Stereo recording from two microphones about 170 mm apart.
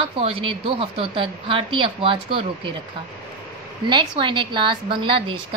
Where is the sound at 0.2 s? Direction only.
30° right (ahead or behind).